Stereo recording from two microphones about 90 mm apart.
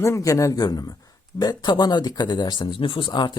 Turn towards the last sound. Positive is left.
turn(degrees=55)  # may be behind; listen again after turning